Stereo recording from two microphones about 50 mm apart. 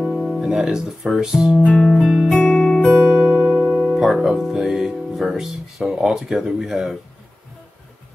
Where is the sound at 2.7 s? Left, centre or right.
Left.